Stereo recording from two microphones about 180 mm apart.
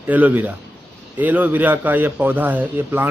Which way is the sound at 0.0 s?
10° right (ahead or behind).